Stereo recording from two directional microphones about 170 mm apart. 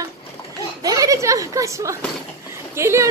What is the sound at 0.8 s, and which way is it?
A woman's voice, 20° right (ahead or behind).